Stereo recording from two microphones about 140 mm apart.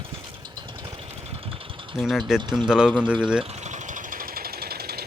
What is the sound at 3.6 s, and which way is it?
Engine, 60° right (ahead or behind).